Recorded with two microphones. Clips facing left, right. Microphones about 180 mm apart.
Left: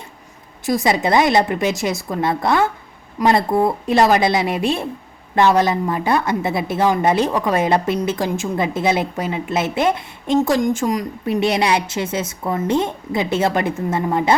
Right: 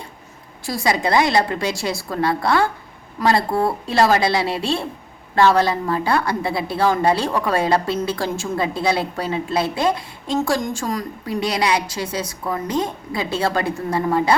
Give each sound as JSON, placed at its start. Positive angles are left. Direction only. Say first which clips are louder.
{"t": 0.6, "sound": "a woman's voice", "louder": "left 3 dB", "side_deg": 20}